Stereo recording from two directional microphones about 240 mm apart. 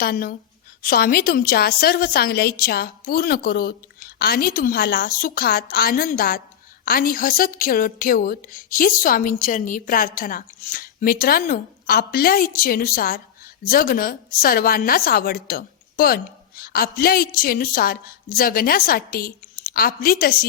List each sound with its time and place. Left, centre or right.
0.0 s a woman's voice: left